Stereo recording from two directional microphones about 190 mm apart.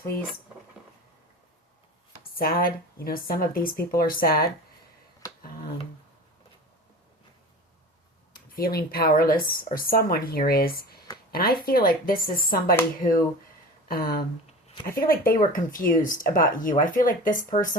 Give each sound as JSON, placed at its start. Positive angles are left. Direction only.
{"t": 2.3, "sound": "speech", "side_deg": 50}
{"t": 8.5, "sound": "speech", "side_deg": 50}
{"t": 13.8, "sound": "speech", "side_deg": 50}